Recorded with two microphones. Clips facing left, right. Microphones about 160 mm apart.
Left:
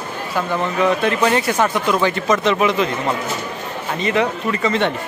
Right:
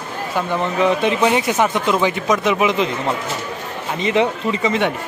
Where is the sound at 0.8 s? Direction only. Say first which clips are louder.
Right 1 dB; 15° right (ahead or behind).